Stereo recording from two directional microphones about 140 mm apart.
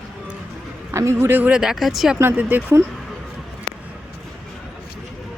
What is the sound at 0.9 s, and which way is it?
Speech, 20° right (ahead or behind).